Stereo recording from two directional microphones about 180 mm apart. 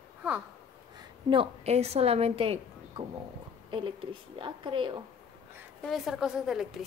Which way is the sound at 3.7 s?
30° right (ahead or behind).